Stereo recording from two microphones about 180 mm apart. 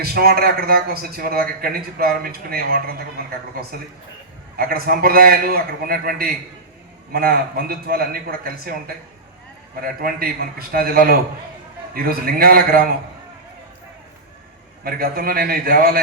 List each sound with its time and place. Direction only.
0.0 s a man's voice: 60° right (ahead or behind)
4.5 s a man's voice: 55° right (ahead or behind)
9.8 s a man's voice: 55° right (ahead or behind)
14.8 s a man's voice: 55° right (ahead or behind)